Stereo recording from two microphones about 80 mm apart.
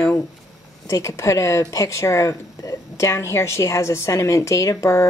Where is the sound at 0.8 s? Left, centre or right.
Left.